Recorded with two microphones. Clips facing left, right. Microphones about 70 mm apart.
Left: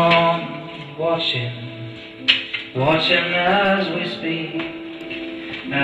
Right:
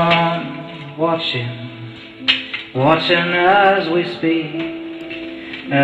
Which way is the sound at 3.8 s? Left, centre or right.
Right.